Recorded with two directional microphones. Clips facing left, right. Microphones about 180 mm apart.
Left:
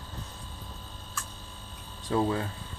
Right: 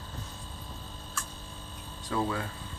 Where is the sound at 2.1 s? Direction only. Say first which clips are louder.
Left 4 dB; 30° left (ahead or behind).